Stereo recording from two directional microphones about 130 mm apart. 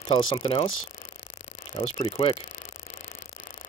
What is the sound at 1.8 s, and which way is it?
Speech, 45° left (ahead or behind).